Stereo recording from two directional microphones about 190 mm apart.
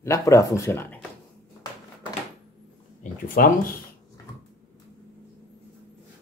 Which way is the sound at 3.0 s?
50° left (ahead or behind).